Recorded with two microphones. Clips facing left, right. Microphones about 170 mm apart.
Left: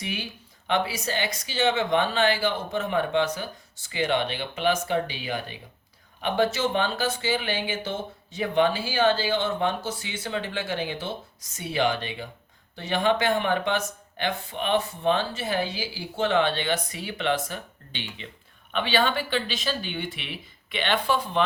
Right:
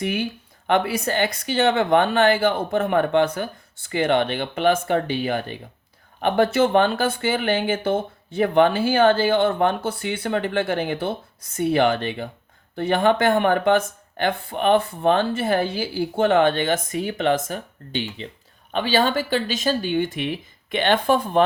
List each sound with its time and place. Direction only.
0.0 s speech: 55° right (ahead or behind)